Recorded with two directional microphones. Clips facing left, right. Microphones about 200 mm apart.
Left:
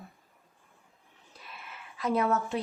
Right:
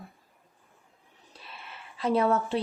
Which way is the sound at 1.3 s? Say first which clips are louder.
Right 1 dB; 30° right (ahead or behind).